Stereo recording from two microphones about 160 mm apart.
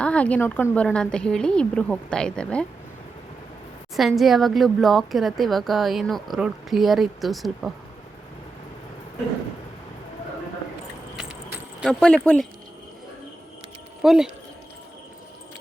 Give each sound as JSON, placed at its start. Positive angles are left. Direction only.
{"t": 0.0, "sound": "speech", "side_deg": 10}
{"t": 3.9, "sound": "speech", "side_deg": 0}
{"t": 11.9, "sound": "speech", "side_deg": 5}
{"t": 14.0, "sound": "speech", "side_deg": 0}